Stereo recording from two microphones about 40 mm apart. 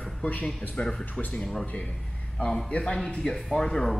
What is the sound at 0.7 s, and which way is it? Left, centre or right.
Speech, centre.